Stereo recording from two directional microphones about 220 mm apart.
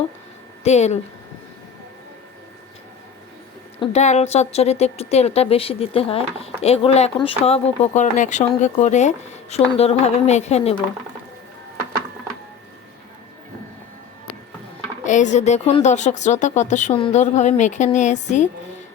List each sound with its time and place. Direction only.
0.6 s speech: 30° left (ahead or behind)
3.8 s a woman's voice: 30° left (ahead or behind)
15.0 s speech: 35° left (ahead or behind)